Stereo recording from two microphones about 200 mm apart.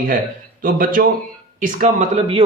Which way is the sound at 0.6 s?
45° right (ahead or behind).